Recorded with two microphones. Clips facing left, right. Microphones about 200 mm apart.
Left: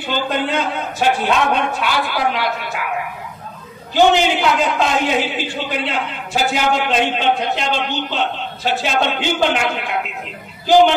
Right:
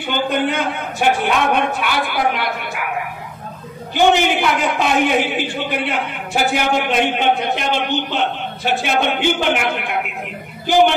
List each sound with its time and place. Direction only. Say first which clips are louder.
0.1 s a man's voice: right 1 dB; 55° right (ahead or behind)
3.9 s a man's voice: left 1 dB; 55° right (ahead or behind)